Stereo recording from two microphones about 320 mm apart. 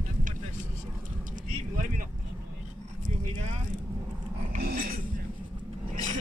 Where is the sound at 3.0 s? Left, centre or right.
Right.